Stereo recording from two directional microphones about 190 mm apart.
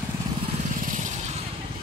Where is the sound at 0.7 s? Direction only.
45° right (ahead or behind).